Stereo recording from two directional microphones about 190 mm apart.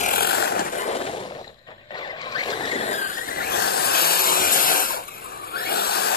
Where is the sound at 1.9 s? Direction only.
25° left (ahead or behind); by 6.2 s 55° left (ahead or behind).